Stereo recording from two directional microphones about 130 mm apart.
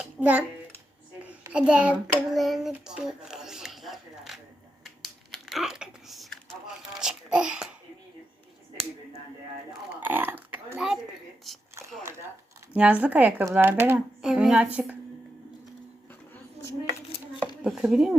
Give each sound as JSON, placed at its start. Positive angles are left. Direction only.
{"t": 0.0, "sound": "a sound", "side_deg": -10}
{"t": 1.5, "sound": "child singing", "side_deg": -10}
{"t": 2.4, "sound": "speech", "side_deg": 0}
{"t": 2.7, "sound": "a sound", "side_deg": -5}
{"t": 4.8, "sound": "typing", "side_deg": 0}
{"t": 7.0, "sound": "babbling", "side_deg": -5}
{"t": 10.0, "sound": "burping", "side_deg": -15}
{"t": 12.7, "sound": "child singing", "side_deg": -10}
{"t": 14.2, "sound": "child singing", "side_deg": -5}
{"t": 17.6, "sound": "speech", "side_deg": -5}